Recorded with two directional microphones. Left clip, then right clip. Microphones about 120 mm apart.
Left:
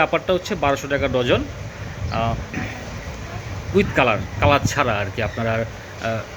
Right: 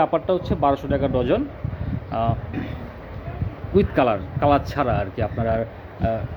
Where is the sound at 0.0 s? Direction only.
10° right (ahead or behind).